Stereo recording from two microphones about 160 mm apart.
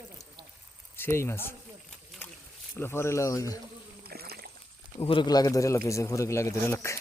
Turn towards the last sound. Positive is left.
turn(degrees=15)  # may be behind; listen again after turning